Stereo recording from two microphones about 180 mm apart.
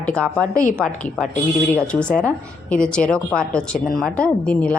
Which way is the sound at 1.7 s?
5° left (ahead or behind).